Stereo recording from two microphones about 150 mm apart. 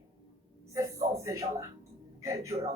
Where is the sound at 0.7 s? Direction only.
20° right (ahead or behind).